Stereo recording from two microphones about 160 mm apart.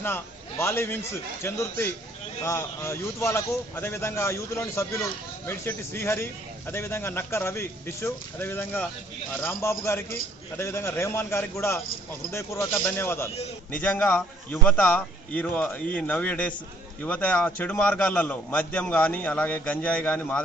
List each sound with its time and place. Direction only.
0.6 s a man's voice: 15° left (ahead or behind)